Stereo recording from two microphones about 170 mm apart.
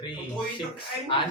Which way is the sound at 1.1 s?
30° left (ahead or behind).